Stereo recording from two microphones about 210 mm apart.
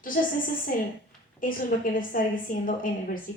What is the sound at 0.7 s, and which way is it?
A woman's voice, 40° left (ahead or behind).